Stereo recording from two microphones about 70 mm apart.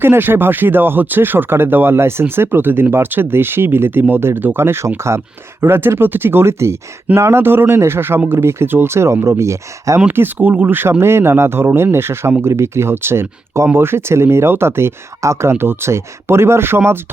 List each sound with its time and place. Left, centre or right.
0.0 s speech: right
10.1 s speech: right